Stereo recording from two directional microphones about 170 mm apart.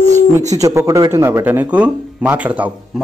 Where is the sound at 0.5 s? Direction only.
20° right (ahead or behind).